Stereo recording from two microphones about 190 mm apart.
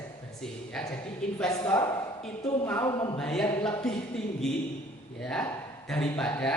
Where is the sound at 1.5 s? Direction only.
20° left (ahead or behind).